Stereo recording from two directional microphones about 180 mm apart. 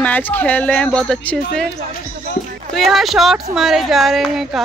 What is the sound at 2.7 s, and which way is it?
A woman's voice, centre (ahead or behind).